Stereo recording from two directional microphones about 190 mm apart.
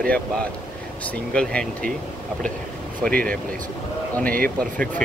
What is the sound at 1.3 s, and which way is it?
Speech, 5° left (ahead or behind).